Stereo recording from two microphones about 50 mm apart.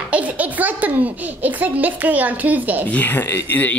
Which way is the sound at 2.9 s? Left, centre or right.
Left.